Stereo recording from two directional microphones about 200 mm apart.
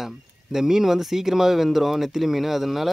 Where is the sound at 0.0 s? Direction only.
Centre (ahead or behind).